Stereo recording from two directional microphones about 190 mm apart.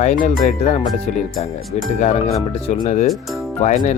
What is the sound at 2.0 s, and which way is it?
Speech, 35° left (ahead or behind).